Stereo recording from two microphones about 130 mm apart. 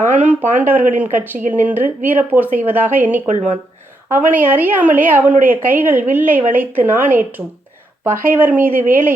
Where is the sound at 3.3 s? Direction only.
70° right (ahead or behind).